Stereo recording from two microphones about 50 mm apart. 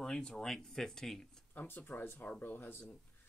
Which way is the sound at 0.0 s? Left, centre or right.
Centre.